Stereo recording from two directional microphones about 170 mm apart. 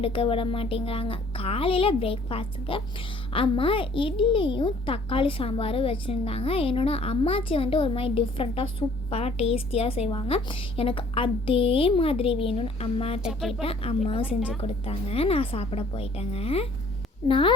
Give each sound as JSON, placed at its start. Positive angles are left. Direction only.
{"t": 0.0, "sound": "a woman's voice", "side_deg": 30}